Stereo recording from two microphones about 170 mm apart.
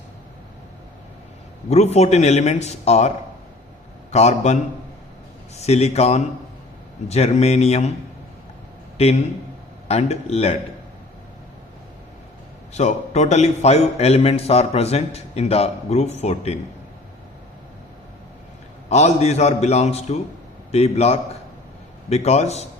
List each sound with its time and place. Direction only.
1.7 s a man's voice: 40° left (ahead or behind)
4.1 s a man's voice: 40° left (ahead or behind)
9.0 s a man's voice: 35° left (ahead or behind)
12.7 s a man's voice: 40° left (ahead or behind)
18.9 s a man's voice: 40° left (ahead or behind)